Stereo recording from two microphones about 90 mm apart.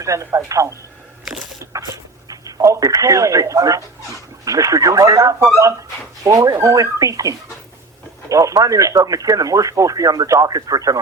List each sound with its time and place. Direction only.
0.0 s speech: 35° right (ahead or behind)